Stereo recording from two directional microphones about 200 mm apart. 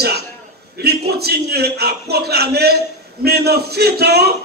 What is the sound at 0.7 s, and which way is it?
A man's voice, 55° right (ahead or behind).